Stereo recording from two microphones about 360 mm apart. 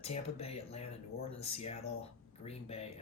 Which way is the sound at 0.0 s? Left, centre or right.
Centre.